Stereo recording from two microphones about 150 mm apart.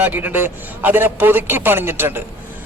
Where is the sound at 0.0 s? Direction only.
10° right (ahead or behind).